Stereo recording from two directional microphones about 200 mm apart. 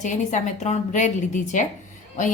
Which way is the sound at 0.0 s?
35° left (ahead or behind).